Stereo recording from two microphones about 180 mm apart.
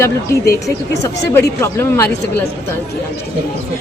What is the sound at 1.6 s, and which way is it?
Speech, 15° left (ahead or behind).